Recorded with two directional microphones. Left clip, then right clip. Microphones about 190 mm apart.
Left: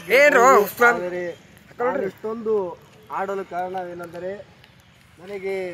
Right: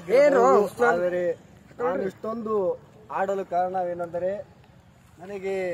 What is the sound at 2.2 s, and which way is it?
Speech, 20° right (ahead or behind).